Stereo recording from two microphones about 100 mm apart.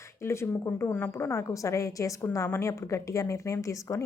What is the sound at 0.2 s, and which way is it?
A woman's voice, 25° left (ahead or behind).